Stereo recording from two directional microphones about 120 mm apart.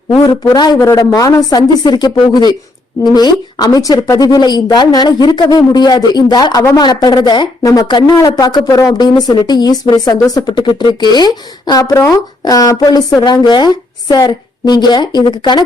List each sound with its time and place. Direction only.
0.3 s speech: 35° left (ahead or behind)